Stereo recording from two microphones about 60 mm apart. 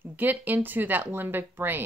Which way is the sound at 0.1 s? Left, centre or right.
Right.